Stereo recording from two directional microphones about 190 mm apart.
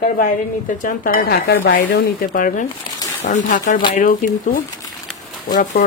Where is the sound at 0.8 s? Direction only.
50° left (ahead or behind).